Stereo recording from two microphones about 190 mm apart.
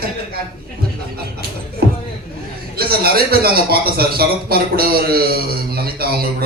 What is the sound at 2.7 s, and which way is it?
A man's voice, 55° right (ahead or behind).